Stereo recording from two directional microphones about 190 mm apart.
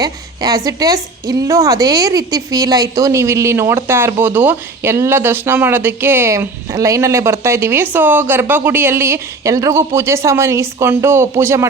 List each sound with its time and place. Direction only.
0.0 s a woman's voice: 20° right (ahead or behind)